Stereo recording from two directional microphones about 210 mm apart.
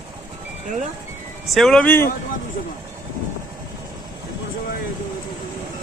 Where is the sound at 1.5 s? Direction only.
Centre (ahead or behind).